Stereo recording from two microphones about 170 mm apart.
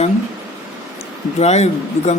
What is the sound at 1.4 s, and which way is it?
Speech, 40° left (ahead or behind).